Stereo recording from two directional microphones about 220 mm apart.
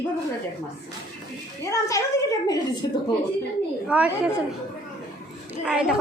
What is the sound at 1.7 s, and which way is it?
Speech, 15° left (ahead or behind).